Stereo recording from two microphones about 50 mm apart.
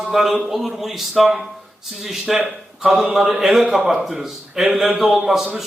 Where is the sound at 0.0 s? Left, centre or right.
Centre.